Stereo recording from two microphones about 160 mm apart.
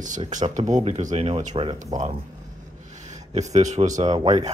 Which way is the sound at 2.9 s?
50° right (ahead or behind).